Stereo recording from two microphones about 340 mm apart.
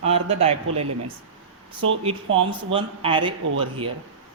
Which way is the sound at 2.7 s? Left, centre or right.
Centre.